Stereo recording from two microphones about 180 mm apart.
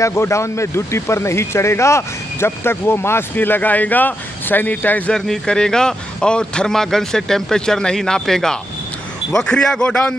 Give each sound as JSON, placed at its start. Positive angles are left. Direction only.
{"t": 0.0, "sound": "a man's voice", "side_deg": 15}